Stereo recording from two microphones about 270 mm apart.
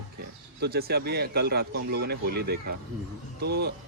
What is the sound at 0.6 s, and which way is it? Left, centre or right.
Speech, right.